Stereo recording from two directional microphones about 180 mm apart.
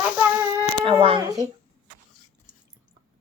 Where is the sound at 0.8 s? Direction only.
30° right (ahead or behind).